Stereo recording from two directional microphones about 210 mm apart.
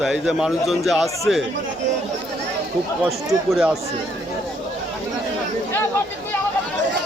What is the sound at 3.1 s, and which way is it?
Speech, centre (ahead or behind).